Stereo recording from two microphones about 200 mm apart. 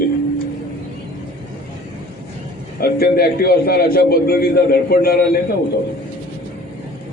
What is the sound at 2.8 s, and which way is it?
A man's voice, 50° left (ahead or behind).